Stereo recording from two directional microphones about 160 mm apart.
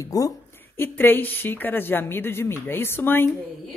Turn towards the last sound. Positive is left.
turn(degrees=15)  # may be behind; listen again after turning